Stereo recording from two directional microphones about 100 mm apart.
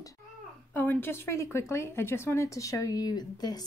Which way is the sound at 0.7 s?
20° left (ahead or behind).